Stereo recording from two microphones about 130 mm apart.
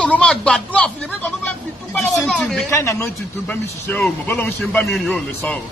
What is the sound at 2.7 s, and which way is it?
A man's voice, 20° left (ahead or behind).